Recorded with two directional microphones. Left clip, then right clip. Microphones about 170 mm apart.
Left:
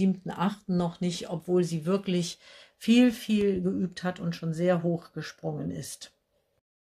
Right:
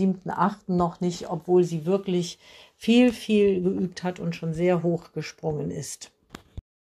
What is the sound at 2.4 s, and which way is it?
Speech, centre (ahead or behind).